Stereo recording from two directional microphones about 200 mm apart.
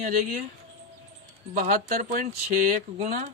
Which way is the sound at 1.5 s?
35° right (ahead or behind).